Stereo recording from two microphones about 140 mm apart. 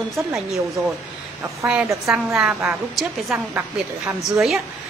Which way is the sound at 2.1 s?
5° right (ahead or behind).